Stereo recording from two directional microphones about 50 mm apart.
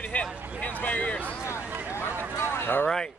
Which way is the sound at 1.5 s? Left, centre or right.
Left.